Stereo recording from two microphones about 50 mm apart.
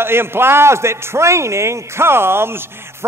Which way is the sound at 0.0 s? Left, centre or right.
Right.